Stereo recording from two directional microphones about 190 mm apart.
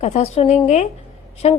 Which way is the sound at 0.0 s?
35° left (ahead or behind).